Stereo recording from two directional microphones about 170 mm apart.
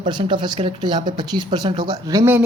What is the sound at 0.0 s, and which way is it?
Speech, 25° right (ahead or behind).